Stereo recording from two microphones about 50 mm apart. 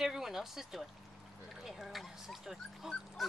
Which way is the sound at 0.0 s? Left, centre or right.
Centre.